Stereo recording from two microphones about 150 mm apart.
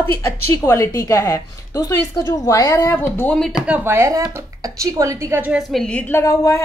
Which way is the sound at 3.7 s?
15° right (ahead or behind).